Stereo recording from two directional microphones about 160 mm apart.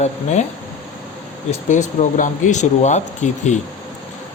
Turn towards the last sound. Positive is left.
turn(degrees=45)  # may be behind; listen again after turning